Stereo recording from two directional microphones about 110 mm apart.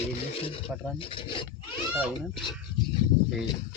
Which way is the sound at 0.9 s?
50° left (ahead or behind).